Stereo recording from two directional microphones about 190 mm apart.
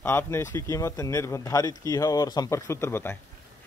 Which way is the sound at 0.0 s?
10° left (ahead or behind).